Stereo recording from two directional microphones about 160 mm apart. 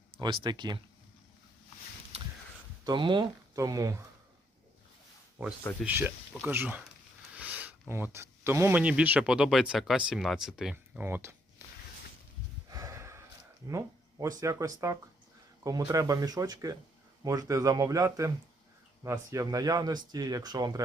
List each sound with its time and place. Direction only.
0.2 s speech: 30° right (ahead or behind)
2.1 s a sound: 40° right (ahead or behind)
2.8 s speech: 30° right (ahead or behind)
5.4 s speech: 10° right (ahead or behind)
11.0 s speech: 15° right (ahead or behind)
12.7 s a sound: 20° right (ahead or behind)
13.7 s speech: 20° right (ahead or behind)